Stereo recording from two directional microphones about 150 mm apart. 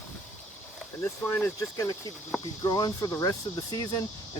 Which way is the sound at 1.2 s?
15° left (ahead or behind).